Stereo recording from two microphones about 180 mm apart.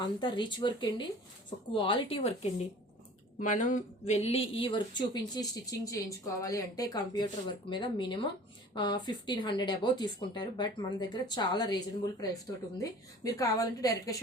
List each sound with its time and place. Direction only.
0.0 s a woman's voice: 25° left (ahead or behind)
3.3 s a woman's voice: 45° left (ahead or behind); by 11.8 s 25° left (ahead or behind)
12.8 s a woman's voice: 20° left (ahead or behind)